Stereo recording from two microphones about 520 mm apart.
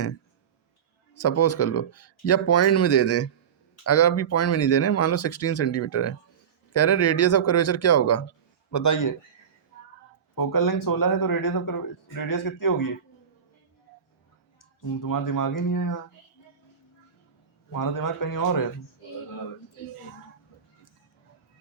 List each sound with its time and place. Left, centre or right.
1.1 s speech: left
10.3 s speech: left
14.8 s speech: left
17.7 s speech: left